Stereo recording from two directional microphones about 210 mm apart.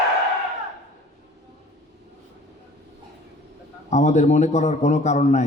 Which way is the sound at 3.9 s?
35° left (ahead or behind).